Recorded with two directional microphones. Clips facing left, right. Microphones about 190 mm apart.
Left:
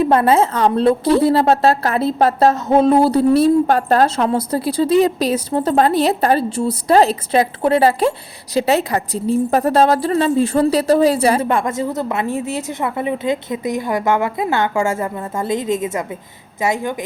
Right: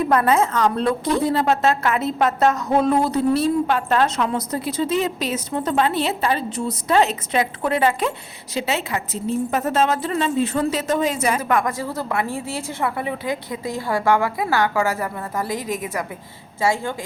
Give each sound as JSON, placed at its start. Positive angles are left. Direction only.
{"t": 0.0, "sound": "a woman's voice", "side_deg": 30}